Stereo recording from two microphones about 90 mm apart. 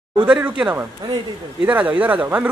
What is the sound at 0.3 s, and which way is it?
Speech, 15° right (ahead or behind).